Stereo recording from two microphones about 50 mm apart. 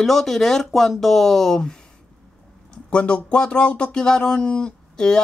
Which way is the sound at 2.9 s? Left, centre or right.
Left.